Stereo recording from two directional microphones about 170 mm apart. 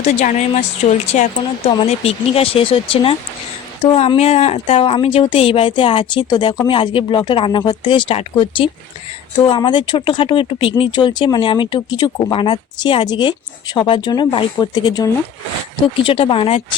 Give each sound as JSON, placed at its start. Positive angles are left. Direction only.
{"t": 0.0, "sound": "speech", "side_deg": 45}